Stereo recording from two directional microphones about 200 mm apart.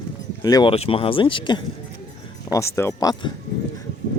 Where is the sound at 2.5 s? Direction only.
15° left (ahead or behind).